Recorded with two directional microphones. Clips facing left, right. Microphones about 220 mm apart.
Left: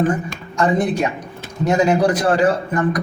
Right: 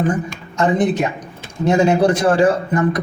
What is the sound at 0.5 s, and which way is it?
Speech, 20° right (ahead or behind).